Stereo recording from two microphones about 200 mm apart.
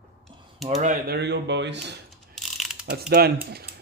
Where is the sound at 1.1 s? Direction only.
55° right (ahead or behind).